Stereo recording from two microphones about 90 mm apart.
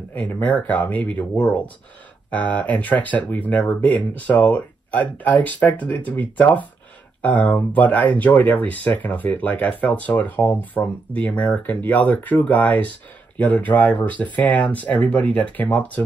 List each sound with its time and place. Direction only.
0.1 s speech: 20° left (ahead or behind)